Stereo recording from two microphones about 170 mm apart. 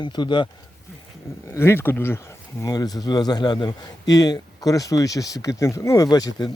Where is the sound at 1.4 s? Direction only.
15° left (ahead or behind).